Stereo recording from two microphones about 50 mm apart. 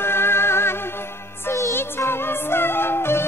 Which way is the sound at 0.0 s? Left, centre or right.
Left.